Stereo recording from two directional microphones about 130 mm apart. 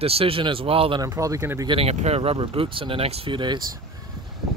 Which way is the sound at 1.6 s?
45° right (ahead or behind).